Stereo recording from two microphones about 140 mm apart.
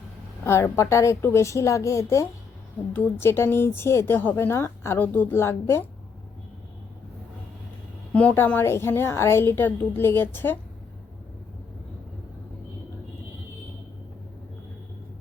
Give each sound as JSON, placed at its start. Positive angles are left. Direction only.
{"t": 0.4, "sound": "a woman's voice", "side_deg": 20}
{"t": 8.1, "sound": "a woman's voice", "side_deg": 10}